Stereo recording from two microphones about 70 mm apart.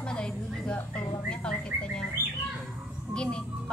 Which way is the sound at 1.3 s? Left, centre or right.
Centre.